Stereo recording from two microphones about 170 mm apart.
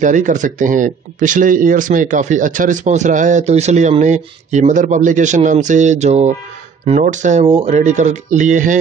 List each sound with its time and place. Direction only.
0.0 s speech: 50° right (ahead or behind)